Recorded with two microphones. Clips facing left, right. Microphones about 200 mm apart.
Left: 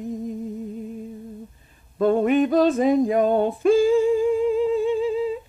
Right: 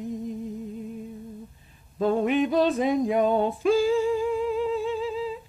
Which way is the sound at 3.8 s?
50° left (ahead or behind).